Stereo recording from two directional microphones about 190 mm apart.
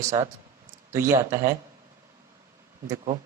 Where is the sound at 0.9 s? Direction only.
15° right (ahead or behind).